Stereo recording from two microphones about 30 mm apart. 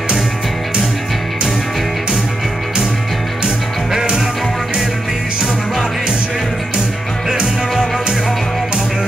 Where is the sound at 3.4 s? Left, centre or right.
Right.